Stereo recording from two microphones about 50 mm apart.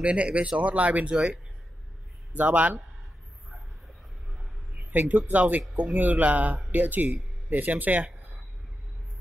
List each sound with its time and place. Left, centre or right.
0.0 s speech: right
2.3 s a man's voice: right
4.7 s a man's voice: right